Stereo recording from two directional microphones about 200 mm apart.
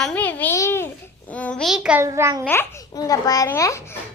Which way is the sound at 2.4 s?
10° left (ahead or behind).